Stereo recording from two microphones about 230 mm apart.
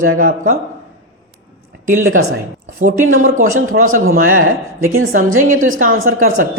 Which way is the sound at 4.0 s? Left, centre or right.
Right.